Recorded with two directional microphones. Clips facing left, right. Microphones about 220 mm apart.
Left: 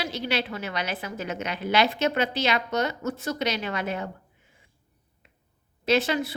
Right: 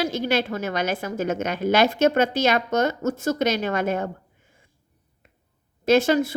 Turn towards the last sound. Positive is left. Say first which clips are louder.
# right 6 dB
turn(degrees=-45)  # may be behind; listen again after turning